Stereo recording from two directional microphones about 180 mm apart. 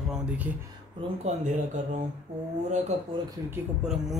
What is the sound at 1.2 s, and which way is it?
Speech, 40° right (ahead or behind).